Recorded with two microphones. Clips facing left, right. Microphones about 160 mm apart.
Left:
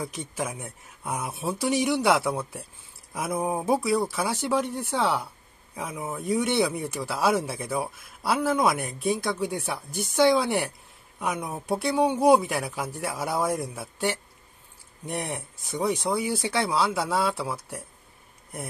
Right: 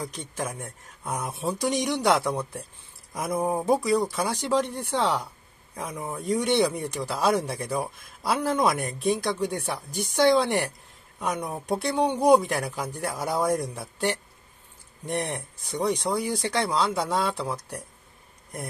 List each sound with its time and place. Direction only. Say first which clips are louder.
0.0 s speech: left 1 dB; 5° left (ahead or behind)